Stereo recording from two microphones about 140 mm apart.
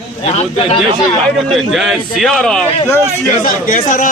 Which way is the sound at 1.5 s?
Centre (ahead or behind).